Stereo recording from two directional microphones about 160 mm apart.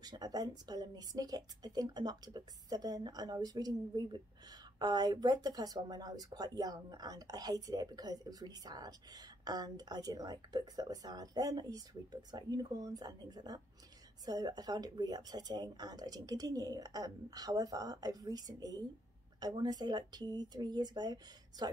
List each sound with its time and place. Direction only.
0.0 s speech: 25° right (ahead or behind)